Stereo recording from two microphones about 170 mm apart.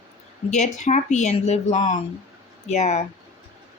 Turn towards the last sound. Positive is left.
turn(degrees=45)  # may be behind; listen again after turning